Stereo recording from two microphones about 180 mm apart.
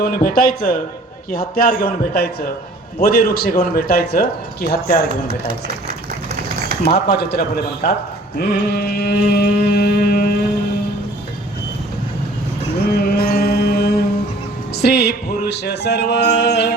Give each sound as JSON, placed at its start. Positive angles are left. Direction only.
{"t": 0.0, "sound": "speech", "side_deg": 55}
{"t": 6.8, "sound": "speech", "side_deg": 65}
{"t": 8.4, "sound": "a sound", "side_deg": 60}
{"t": 12.9, "sound": "music", "side_deg": 60}